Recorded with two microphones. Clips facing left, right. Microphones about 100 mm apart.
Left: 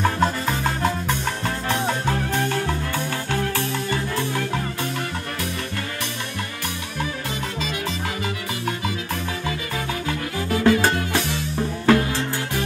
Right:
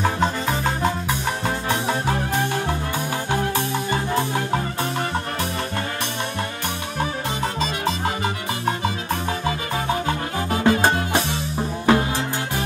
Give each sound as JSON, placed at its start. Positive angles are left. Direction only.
{"t": 0.0, "sound": "music", "side_deg": -5}
{"t": 2.0, "sound": "music", "side_deg": -15}
{"t": 9.5, "sound": "music", "side_deg": -30}